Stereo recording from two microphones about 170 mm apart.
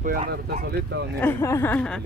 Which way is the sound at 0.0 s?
55° right (ahead or behind).